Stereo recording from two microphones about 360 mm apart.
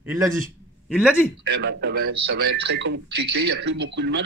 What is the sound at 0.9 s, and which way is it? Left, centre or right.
Speech, centre.